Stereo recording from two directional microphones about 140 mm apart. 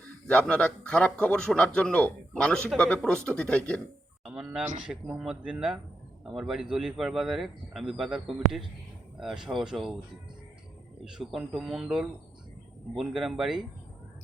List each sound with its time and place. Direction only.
0.3 s a man's voice: 10° left (ahead or behind)
4.3 s speech: 5° right (ahead or behind)
11.0 s speech: 5° right (ahead or behind)